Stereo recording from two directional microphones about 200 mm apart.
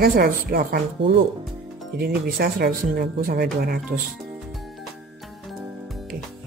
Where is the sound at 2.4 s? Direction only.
45° right (ahead or behind).